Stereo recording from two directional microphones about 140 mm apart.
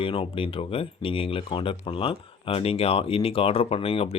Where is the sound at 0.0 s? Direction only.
40° left (ahead or behind).